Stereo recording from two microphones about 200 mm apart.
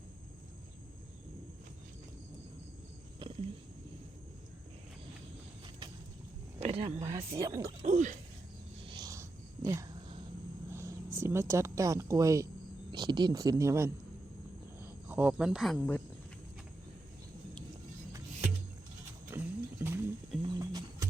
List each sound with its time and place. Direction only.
3.2 s wild animals: 25° right (ahead or behind)
6.6 s speech: 30° right (ahead or behind)
7.3 s speech: 15° right (ahead or behind)
7.9 s speech: 35° right (ahead or behind)
8.8 s a sound: 25° right (ahead or behind)
10.7 s speech: 15° right (ahead or behind); by 16.0 s 10° left (ahead or behind)
19.3 s a sound: 10° right (ahead or behind)